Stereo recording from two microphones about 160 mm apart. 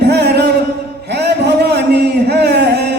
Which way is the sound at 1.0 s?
90° right.